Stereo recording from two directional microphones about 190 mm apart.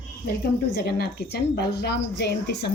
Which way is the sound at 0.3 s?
55° left (ahead or behind).